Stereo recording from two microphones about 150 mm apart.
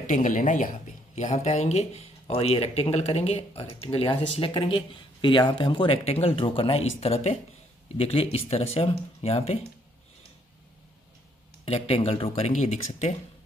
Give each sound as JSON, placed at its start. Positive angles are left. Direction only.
{"t": 0.0, "sound": "speech", "side_deg": 55}
{"t": 11.6, "sound": "speech", "side_deg": 40}